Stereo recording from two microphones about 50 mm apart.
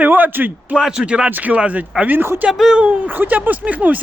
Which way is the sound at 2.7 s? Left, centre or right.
Right.